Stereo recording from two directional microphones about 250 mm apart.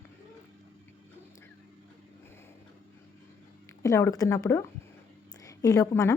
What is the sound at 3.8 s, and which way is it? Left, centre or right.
A woman's voice, centre.